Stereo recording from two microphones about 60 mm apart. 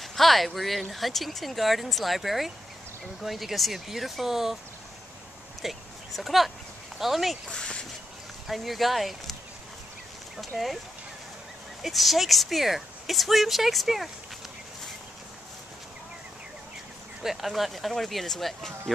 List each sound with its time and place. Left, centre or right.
0.0 s speech: centre
5.6 s a sound: centre
7.0 s speech: centre
7.5 s a sound: centre
8.5 s speech: centre
11.8 s speech: centre
17.2 s speech: centre